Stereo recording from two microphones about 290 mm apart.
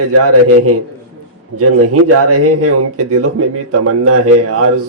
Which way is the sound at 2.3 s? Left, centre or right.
Right.